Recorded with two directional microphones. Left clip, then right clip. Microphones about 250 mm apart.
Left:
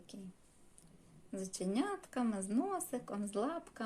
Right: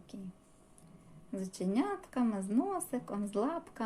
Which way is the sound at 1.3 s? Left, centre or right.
Centre.